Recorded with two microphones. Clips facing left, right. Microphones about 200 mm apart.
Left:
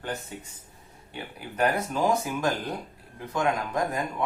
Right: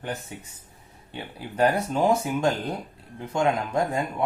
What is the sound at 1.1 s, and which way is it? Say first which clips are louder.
Speech: right 3 dB; 25° right (ahead or behind).